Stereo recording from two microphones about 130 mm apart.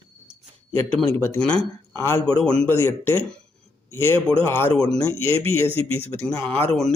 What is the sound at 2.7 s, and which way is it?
A man's voice, 20° left (ahead or behind).